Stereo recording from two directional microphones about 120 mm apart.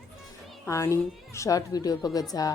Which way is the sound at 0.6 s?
25° left (ahead or behind).